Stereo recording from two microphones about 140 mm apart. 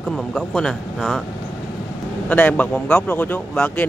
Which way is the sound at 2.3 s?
10° left (ahead or behind).